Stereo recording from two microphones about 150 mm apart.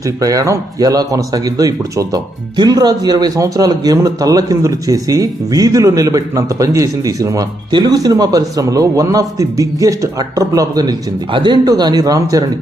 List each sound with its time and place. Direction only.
0.0 s speech: 25° right (ahead or behind)